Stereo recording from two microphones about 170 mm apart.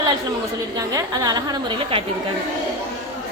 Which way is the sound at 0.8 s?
20° right (ahead or behind).